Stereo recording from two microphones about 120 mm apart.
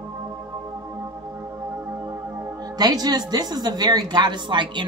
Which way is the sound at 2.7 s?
35° right (ahead or behind).